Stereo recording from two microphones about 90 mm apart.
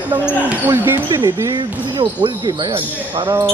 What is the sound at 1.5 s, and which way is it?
Speech, 55° right (ahead or behind).